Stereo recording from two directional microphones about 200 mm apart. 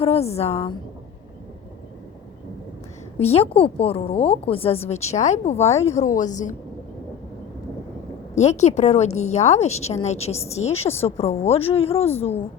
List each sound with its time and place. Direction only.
0.0 s a woman's voice: 30° left (ahead or behind)
3.2 s a woman's voice: 30° left (ahead or behind)
5.7 s speech: 15° left (ahead or behind)
6.0 s a woman's voice: 40° left (ahead or behind)
8.4 s a woman's voice: 35° left (ahead or behind)